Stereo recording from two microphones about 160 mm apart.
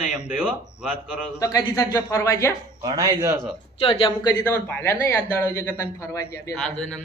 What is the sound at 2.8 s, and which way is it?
Speech, 25° right (ahead or behind).